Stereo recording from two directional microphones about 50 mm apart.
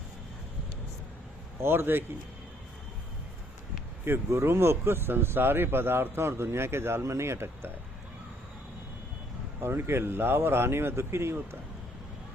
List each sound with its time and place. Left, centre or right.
1.6 s speech: right
4.1 s speech: right
7.0 s speech: right
9.6 s speech: right